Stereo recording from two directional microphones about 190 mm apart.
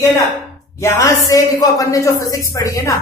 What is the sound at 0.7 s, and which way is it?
Speech, 15° left (ahead or behind).